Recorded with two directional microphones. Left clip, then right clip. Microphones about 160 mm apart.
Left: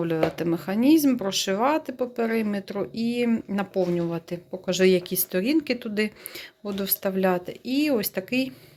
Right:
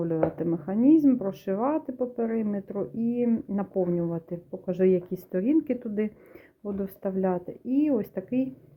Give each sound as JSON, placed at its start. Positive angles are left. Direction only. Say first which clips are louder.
{"t": 0.0, "sound": "speech", "louder": "left 2 dB", "side_deg": 15}